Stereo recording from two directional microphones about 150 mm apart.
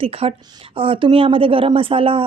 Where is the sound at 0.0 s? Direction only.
40° right (ahead or behind).